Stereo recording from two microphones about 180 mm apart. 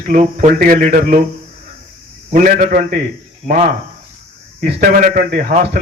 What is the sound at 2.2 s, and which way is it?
A man's voice, 50° right (ahead or behind).